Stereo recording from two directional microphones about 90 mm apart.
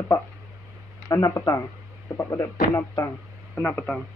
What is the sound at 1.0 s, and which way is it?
Speech, 40° left (ahead or behind).